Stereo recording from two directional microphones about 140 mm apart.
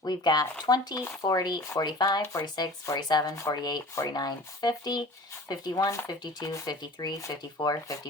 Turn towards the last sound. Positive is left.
turn(degrees=25)  # may be behind; listen again after turning